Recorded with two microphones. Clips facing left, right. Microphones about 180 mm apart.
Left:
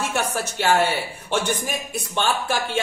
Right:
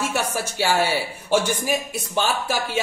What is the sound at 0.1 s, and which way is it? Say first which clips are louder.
A man's voice: even; 10° right (ahead or behind).